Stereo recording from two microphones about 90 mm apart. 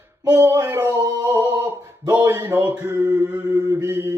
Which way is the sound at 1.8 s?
35° right (ahead or behind).